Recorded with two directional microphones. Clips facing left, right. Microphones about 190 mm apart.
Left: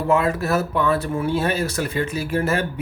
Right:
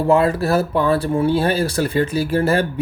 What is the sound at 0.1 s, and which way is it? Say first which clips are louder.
Speech: right 3 dB; 30° right (ahead or behind).